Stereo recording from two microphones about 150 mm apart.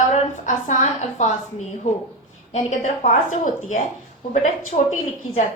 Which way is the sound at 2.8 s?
60° left (ahead or behind).